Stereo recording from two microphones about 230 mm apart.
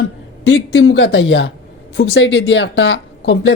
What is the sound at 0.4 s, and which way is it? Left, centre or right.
Speech, left.